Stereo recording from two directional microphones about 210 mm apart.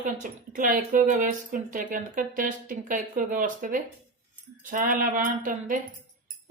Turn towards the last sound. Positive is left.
turn(degrees=-40)  # may be behind; listen again after turning